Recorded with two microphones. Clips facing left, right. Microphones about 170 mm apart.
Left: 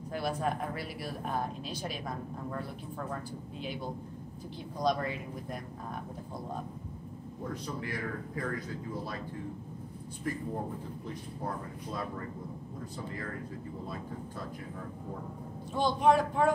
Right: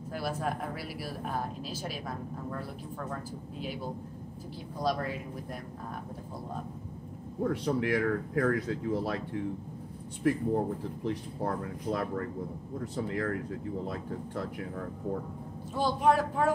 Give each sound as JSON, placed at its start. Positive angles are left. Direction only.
{"t": 0.1, "sound": "speech", "side_deg": -5}
{"t": 4.7, "sound": "speech", "side_deg": -5}
{"t": 7.4, "sound": "speech", "side_deg": -75}
{"t": 15.7, "sound": "speech", "side_deg": -5}